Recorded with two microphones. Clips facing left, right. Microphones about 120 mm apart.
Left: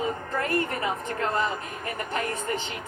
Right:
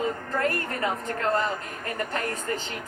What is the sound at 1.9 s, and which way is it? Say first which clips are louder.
Speech: even; 20° left (ahead or behind).